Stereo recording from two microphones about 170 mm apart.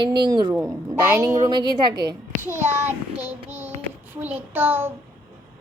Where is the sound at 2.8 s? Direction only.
10° right (ahead or behind).